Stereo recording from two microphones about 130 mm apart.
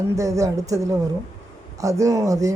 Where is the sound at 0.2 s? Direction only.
25° right (ahead or behind).